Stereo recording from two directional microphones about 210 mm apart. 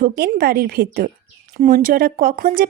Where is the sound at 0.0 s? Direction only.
40° right (ahead or behind).